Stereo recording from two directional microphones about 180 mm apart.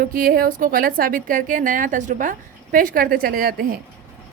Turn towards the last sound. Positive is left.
turn(degrees=-55)  # may be behind; listen again after turning